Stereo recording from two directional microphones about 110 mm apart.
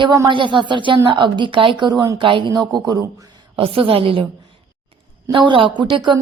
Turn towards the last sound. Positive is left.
turn(degrees=-45)  # may be behind; listen again after turning